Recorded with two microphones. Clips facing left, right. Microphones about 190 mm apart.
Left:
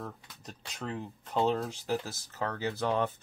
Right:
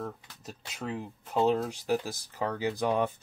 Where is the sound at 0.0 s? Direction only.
5° right (ahead or behind).